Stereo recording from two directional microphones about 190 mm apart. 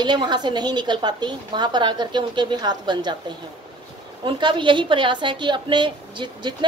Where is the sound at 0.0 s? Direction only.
25° right (ahead or behind).